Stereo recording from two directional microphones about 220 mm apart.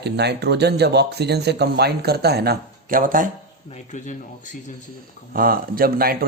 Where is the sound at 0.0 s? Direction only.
50° right (ahead or behind).